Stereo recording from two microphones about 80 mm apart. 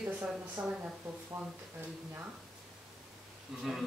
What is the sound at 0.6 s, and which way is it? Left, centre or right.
Speech, right.